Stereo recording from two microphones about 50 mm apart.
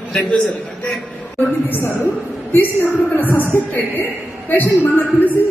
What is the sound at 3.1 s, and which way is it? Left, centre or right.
A woman's voice, left.